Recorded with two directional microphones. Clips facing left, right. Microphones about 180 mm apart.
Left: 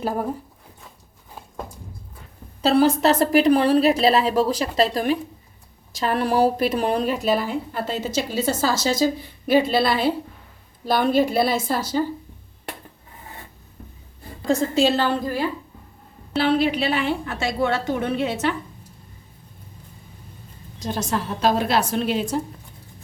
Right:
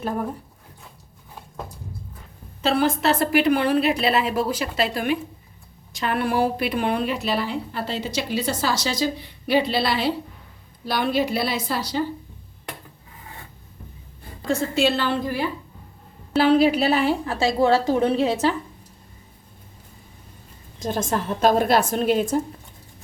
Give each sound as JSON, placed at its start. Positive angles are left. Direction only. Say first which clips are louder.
{"t": 2.6, "sound": "a woman's voice", "louder": "left 4 dB", "side_deg": 40}
{"t": 14.4, "sound": "a woman's voice", "louder": "left 2 dB", "side_deg": 35}
{"t": 16.3, "sound": "a woman's voice", "louder": "right 3 dB", "side_deg": -40}
{"t": 20.7, "sound": "a woman's voice", "louder": "right 1 dB", "side_deg": -50}